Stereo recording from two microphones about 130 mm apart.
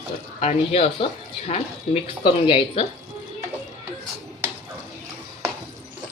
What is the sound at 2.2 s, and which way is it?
Speech, 40° left (ahead or behind).